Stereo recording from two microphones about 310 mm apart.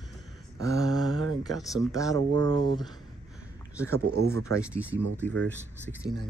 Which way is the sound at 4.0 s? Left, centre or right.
Right.